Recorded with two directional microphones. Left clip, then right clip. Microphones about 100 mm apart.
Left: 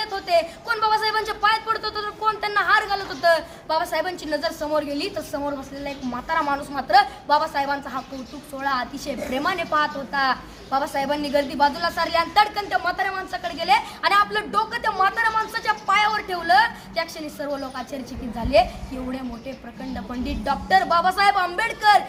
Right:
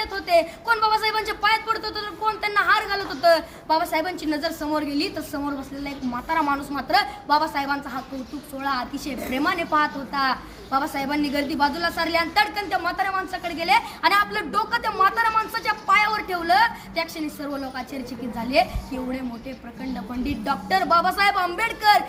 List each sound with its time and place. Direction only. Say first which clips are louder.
0.3 s a woman's voice: right 2 dB; 20° left (ahead or behind)
20.2 s a woman's voice: left 1 dB; 20° left (ahead or behind)